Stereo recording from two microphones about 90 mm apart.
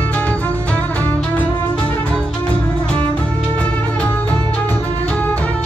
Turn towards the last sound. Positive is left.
turn(degrees=15)  # may be behind; listen again after turning